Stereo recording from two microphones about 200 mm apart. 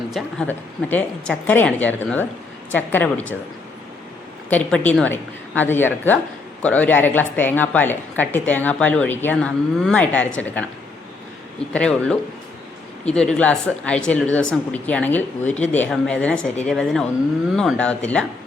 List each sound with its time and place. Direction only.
0.1 s a woman's voice: 5° left (ahead or behind)
4.4 s a woman's voice: 10° left (ahead or behind)
11.7 s speech: 5° left (ahead or behind)